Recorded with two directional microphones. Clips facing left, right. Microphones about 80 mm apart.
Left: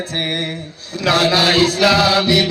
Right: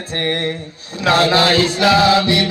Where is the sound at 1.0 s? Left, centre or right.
Right.